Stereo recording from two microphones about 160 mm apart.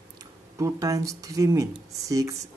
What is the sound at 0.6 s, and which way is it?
Speech, 20° right (ahead or behind).